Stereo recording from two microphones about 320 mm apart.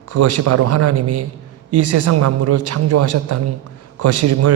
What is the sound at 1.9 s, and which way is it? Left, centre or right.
Speech, right.